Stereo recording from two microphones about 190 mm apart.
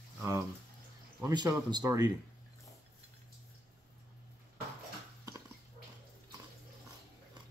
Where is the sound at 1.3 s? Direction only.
20° right (ahead or behind).